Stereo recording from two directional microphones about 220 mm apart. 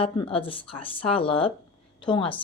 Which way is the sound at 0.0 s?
25° left (ahead or behind).